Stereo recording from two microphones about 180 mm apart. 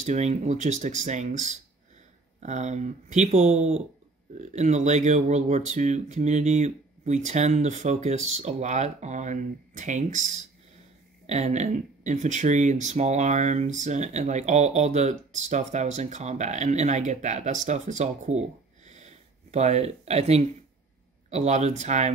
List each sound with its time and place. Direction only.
0.0 s speech: 40° right (ahead or behind)
18.9 s a sound: 40° right (ahead or behind)
21.3 s speech: 40° right (ahead or behind)